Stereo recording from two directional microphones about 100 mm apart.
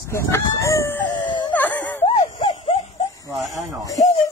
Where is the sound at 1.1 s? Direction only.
50° left (ahead or behind).